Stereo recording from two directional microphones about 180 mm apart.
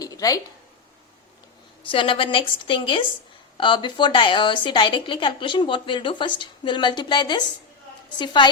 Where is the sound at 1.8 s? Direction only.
30° left (ahead or behind).